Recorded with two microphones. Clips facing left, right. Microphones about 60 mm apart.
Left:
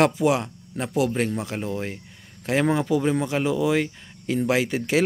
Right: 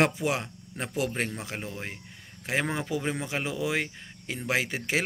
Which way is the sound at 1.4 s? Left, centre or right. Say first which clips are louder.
Left 7 dB; centre.